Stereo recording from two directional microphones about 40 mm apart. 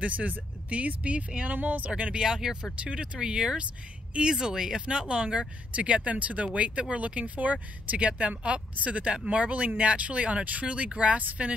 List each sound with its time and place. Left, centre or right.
0.0 s speech: right
1.5 s speech: right
2.1 s speech: centre